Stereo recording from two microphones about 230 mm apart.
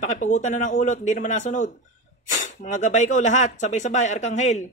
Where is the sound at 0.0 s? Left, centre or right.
Left.